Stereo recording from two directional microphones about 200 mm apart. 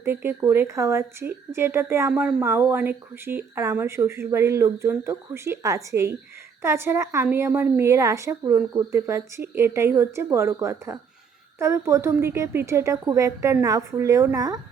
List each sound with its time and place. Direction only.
0.0 s a woman's voice: 10° right (ahead or behind)